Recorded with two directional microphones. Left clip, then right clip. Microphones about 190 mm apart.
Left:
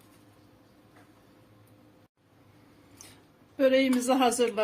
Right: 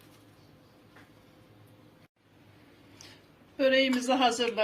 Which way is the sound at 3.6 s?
70° left (ahead or behind).